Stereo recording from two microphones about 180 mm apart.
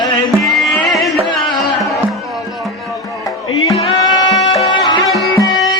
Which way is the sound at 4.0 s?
25° left (ahead or behind).